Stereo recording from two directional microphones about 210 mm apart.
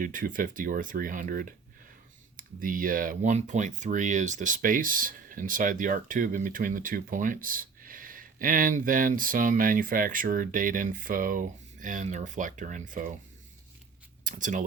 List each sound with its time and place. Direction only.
0.0 s speech: 40° right (ahead or behind)
14.3 s speech: 40° right (ahead or behind)